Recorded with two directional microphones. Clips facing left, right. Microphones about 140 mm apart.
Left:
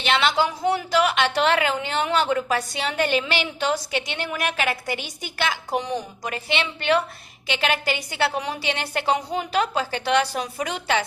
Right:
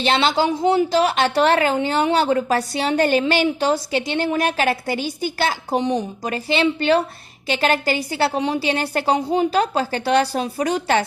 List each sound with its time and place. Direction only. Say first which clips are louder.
0.0 s a woman's voice: right 3 dB; 30° right (ahead or behind)